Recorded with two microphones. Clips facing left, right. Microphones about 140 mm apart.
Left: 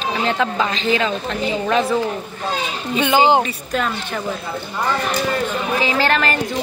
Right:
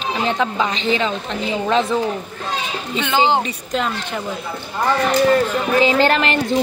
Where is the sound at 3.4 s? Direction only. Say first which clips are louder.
Even; 20° right (ahead or behind).